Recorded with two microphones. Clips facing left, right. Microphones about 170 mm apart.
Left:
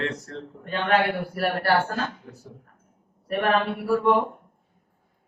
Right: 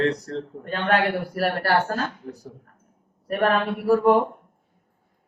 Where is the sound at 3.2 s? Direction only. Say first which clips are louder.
Right 1 dB; 40° right (ahead or behind).